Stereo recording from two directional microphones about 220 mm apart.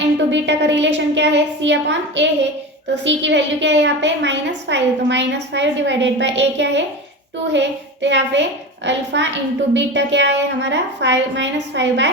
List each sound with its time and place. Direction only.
0.3 s a woman's voice: 55° right (ahead or behind)